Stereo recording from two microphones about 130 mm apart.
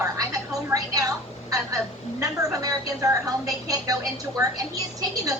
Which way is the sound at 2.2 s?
25° right (ahead or behind).